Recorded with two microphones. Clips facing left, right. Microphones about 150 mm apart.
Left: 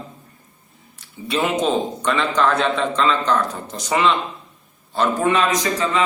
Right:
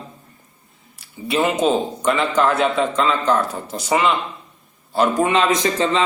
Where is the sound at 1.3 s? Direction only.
5° right (ahead or behind).